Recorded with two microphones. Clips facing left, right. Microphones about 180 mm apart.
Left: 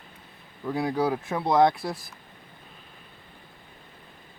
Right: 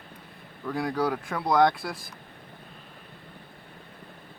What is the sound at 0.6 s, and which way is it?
Speech, 25° left (ahead or behind).